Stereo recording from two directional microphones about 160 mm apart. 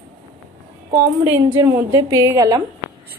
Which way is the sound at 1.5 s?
15° right (ahead or behind).